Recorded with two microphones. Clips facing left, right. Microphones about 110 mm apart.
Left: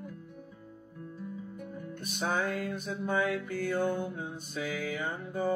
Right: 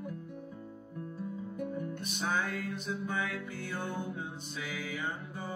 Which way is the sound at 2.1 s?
40° left (ahead or behind).